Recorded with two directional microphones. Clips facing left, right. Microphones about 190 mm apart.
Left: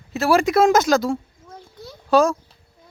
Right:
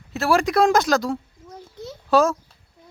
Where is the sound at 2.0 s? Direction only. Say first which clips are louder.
Left 1 dB; centre (ahead or behind).